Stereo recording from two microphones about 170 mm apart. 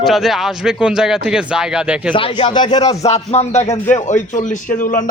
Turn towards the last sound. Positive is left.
turn(degrees=50)  # may be behind; listen again after turning